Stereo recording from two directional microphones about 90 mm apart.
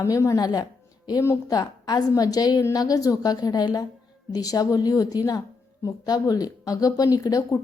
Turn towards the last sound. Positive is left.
turn(degrees=40)  # may be behind; listen again after turning